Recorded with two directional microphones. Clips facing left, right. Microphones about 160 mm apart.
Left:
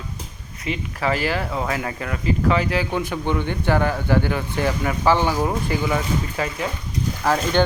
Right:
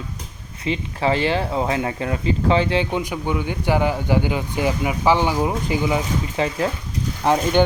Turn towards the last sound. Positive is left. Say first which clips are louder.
# right 2 dB
turn(degrees=-20)  # may be behind; listen again after turning